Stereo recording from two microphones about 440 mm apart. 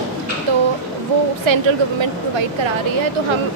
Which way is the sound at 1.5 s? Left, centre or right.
Right.